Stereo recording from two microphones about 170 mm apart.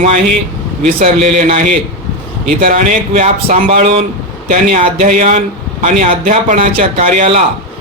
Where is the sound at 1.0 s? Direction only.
35° right (ahead or behind).